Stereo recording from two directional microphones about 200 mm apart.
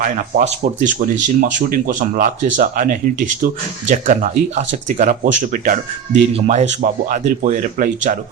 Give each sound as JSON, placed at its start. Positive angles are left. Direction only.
{"t": 0.0, "sound": "speech", "side_deg": -35}